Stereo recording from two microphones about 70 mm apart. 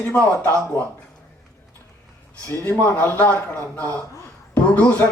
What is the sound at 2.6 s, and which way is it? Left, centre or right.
Speech, left.